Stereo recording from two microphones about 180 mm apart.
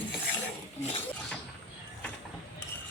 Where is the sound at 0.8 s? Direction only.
35° left (ahead or behind).